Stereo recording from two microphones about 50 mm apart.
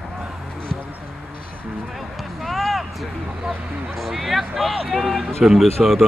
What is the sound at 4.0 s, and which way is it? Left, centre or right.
Speech, centre.